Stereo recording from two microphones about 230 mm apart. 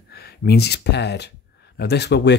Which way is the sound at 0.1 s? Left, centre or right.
Left.